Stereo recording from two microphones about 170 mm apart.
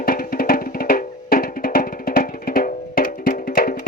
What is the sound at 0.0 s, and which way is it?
Music, 60° left (ahead or behind).